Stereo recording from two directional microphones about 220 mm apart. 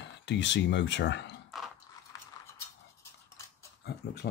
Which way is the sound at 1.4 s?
Centre (ahead or behind).